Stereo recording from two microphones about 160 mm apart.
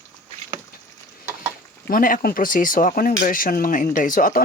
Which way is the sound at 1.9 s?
60° left (ahead or behind).